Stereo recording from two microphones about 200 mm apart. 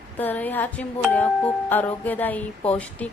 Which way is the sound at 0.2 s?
10° left (ahead or behind).